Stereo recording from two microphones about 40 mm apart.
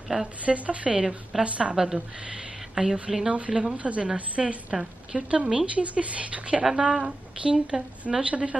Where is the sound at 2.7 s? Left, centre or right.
Centre.